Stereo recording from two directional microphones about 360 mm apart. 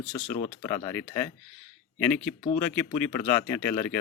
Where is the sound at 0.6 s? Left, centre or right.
Centre.